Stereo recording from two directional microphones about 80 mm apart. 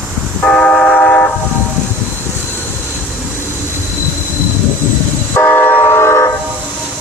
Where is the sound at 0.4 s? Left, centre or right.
Centre.